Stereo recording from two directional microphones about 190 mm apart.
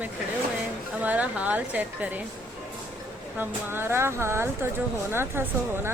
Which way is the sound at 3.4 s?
10° right (ahead or behind).